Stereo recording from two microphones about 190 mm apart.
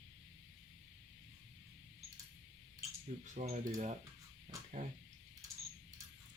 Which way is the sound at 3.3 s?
35° right (ahead or behind).